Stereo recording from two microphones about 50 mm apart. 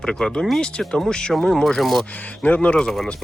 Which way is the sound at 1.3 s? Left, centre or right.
Centre.